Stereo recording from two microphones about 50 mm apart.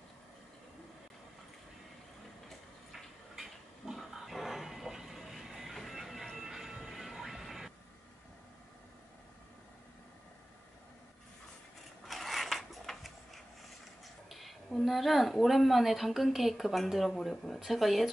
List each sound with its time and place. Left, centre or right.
2.9 s a sound: centre
12.1 s sewing machine: centre
14.0 s a woman's voice: centre